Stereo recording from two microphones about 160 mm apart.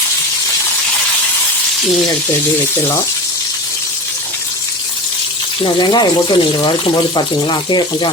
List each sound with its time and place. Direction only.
5.6 s speech: 25° left (ahead or behind)